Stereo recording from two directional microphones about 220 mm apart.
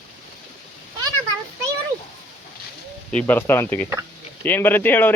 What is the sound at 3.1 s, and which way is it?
Speech, 5° left (ahead or behind).